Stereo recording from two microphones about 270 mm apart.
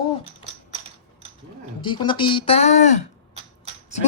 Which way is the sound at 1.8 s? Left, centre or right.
Centre.